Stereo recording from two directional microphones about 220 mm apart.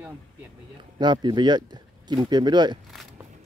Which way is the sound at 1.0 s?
20° right (ahead or behind).